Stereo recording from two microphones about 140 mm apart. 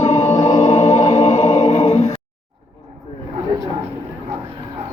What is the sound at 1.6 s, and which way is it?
Choir, 50° left (ahead or behind).